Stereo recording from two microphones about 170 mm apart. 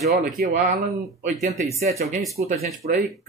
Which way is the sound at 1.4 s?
45° right (ahead or behind).